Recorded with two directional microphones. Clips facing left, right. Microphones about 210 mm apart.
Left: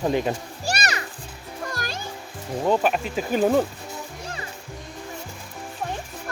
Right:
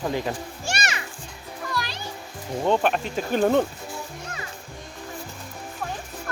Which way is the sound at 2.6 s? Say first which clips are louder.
Left 1 dB; 5° left (ahead or behind).